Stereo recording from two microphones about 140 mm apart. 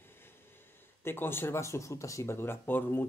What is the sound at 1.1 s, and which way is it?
Speech, 15° left (ahead or behind).